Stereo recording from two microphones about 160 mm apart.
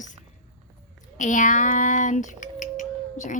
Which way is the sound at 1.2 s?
55° left (ahead or behind).